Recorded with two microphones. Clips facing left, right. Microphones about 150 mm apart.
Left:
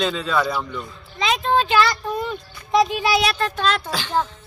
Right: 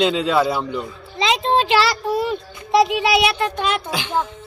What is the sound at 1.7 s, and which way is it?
Child singing, 90° right.